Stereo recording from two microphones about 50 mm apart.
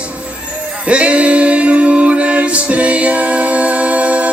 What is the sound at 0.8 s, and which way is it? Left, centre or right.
Music, right.